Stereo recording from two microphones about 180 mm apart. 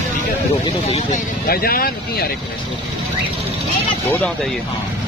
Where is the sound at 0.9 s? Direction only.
45° left (ahead or behind).